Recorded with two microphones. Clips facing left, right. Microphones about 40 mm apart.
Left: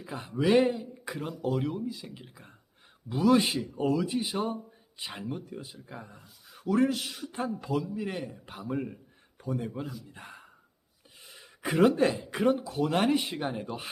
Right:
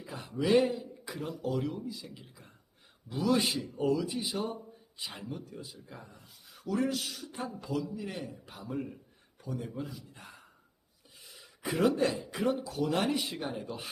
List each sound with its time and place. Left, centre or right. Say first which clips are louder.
0.0 s speech: left 4 dB; centre